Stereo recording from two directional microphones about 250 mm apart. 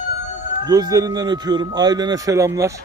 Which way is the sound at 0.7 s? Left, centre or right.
Centre.